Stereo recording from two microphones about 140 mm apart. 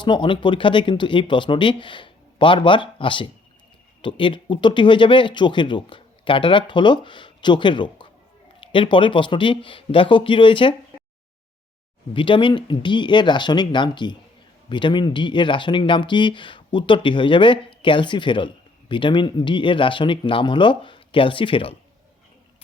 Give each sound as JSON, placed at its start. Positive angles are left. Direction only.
{"t": 0.0, "sound": "speech", "side_deg": 35}
{"t": 12.1, "sound": "speech", "side_deg": 35}